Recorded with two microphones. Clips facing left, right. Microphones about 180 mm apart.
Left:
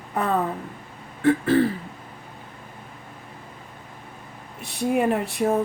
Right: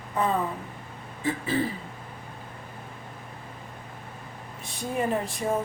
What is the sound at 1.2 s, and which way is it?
Throat clearing, 65° left (ahead or behind).